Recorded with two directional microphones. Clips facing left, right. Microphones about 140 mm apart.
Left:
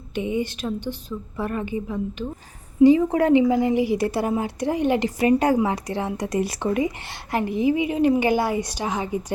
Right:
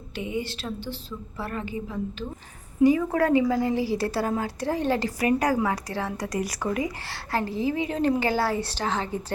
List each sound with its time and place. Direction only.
0.1 s a woman's voice: 20° left (ahead or behind)